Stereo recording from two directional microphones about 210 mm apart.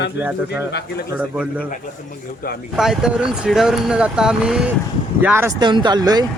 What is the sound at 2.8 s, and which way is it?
A woman's voice, centre (ahead or behind).